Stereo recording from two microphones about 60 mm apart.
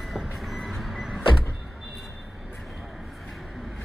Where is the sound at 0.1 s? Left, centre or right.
Centre.